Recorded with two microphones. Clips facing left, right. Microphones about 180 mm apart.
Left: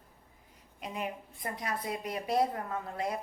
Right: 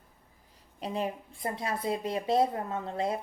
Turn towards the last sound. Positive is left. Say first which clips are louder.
# right 4 dB
turn(degrees=-25)  # may be behind; listen again after turning